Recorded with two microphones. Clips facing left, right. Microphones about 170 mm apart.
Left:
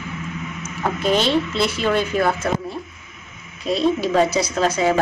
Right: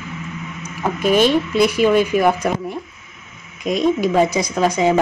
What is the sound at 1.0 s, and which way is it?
Speech, 10° right (ahead or behind).